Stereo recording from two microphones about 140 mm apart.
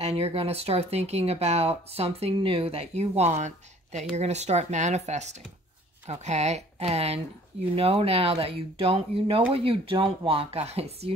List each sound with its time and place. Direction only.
0.0 s speech: 50° right (ahead or behind)